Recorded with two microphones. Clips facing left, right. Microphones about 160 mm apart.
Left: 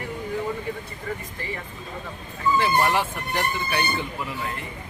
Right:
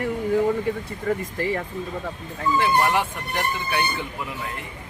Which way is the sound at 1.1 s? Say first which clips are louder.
Right 8 dB; 55° right (ahead or behind).